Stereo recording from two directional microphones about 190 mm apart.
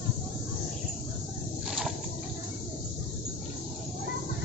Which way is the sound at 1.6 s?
5° right (ahead or behind).